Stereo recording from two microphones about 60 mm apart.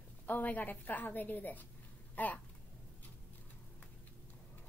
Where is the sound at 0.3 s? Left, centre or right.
Left.